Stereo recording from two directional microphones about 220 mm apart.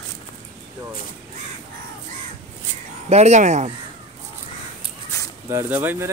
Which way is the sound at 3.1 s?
30° right (ahead or behind).